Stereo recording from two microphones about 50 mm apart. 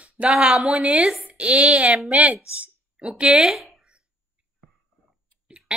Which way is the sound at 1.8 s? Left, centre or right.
Centre.